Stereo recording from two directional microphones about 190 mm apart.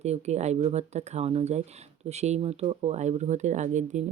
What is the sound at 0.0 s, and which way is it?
Speech, 35° right (ahead or behind).